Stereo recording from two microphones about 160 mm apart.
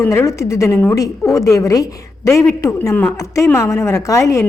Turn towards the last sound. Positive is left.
turn(degrees=20)  # may be behind; listen again after turning